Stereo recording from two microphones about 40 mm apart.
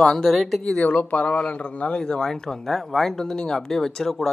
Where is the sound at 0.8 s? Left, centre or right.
Left.